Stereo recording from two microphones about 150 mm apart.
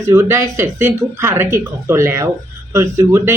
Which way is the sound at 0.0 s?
20° right (ahead or behind).